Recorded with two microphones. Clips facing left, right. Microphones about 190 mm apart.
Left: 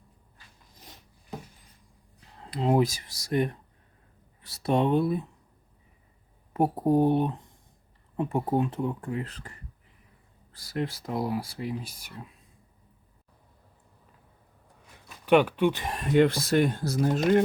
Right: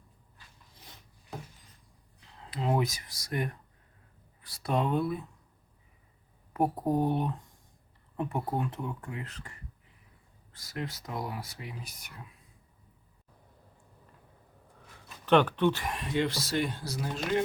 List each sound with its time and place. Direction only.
2.4 s speech: 35° left (ahead or behind)
6.5 s speech: 25° left (ahead or behind)
10.5 s speech: 35° left (ahead or behind)
15.3 s speech: 10° left (ahead or behind)
15.9 s speech: 45° left (ahead or behind)